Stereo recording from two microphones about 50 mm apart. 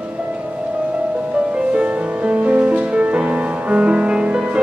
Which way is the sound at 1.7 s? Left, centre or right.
Right.